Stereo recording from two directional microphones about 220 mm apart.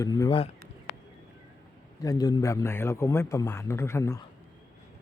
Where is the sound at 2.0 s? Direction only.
15° left (ahead or behind).